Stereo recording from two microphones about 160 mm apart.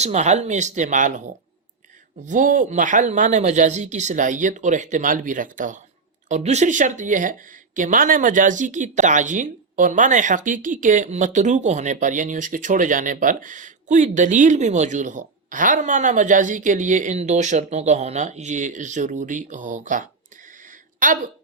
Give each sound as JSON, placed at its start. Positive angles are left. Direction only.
{"t": 0.0, "sound": "speech", "side_deg": -45}
{"t": 2.2, "sound": "speech", "side_deg": -50}
{"t": 20.5, "sound": "a sound", "side_deg": -55}